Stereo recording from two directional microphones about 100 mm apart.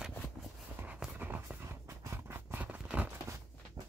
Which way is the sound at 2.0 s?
25° right (ahead or behind).